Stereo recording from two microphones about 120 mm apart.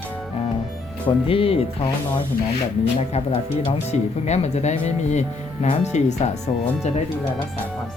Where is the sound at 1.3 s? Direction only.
50° left (ahead or behind).